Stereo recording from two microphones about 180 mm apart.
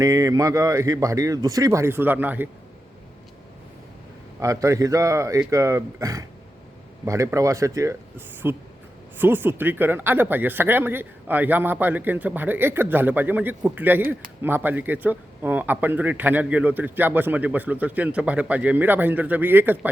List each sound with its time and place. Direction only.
0.0 s speech: 15° right (ahead or behind)
4.4 s speech: 15° right (ahead or behind)